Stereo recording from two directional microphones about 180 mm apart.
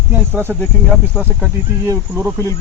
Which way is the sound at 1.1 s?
5° right (ahead or behind).